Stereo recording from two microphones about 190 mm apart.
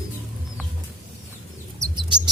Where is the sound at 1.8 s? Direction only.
20° right (ahead or behind).